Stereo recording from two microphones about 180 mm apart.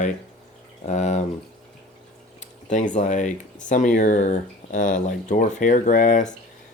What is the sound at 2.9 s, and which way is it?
Speech, 45° left (ahead or behind).